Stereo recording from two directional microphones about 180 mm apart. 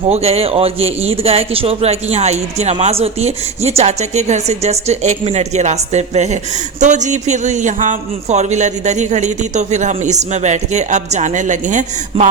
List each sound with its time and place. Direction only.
0.1 s a man's voice: 35° right (ahead or behind)